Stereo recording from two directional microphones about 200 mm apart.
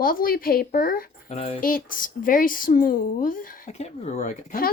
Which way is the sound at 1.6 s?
45° left (ahead or behind).